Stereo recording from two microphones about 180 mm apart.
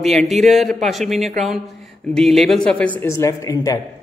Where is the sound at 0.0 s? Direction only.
Centre (ahead or behind).